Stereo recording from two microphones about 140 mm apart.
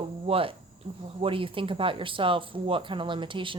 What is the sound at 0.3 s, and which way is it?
Speech, 40° right (ahead or behind).